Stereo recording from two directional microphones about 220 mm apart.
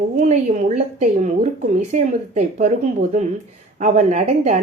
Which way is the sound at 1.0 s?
30° right (ahead or behind).